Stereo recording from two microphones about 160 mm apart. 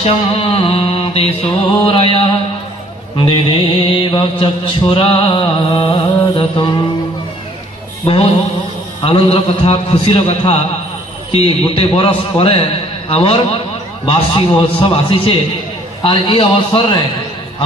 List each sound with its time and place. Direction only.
0.0 s mantra: 35° left (ahead or behind)
3.8 s mantra: 35° left (ahead or behind)
8.0 s music: 35° left (ahead or behind)
9.0 s mantra: 35° left (ahead or behind)